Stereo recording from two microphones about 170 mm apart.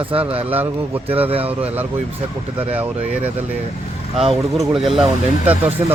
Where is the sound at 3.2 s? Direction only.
10° right (ahead or behind).